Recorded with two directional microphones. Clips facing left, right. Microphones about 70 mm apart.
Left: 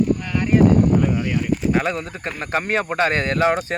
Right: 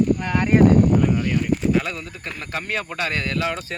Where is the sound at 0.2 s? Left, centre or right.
Right.